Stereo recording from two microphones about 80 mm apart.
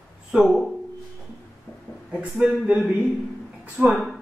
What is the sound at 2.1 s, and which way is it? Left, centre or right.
Speech, centre.